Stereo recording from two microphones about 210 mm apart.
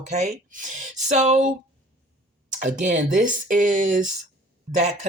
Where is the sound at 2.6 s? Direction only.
35° right (ahead or behind).